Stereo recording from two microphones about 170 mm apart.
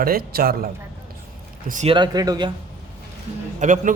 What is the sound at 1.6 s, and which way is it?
Speech, 50° right (ahead or behind).